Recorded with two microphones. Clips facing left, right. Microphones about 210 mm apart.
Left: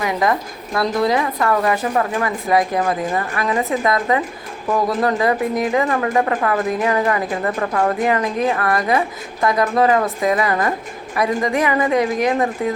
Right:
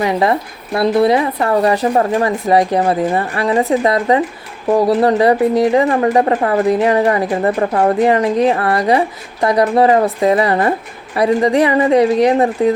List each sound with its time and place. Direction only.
0.0 s speech: 30° right (ahead or behind)